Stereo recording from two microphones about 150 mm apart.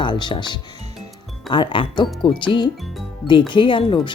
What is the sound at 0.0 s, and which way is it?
Speech, 30° left (ahead or behind).